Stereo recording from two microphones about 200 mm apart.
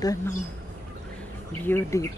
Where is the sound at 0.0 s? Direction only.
15° left (ahead or behind).